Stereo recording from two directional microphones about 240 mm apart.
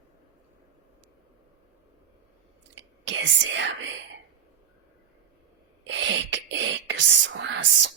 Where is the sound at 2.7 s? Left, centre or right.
Right.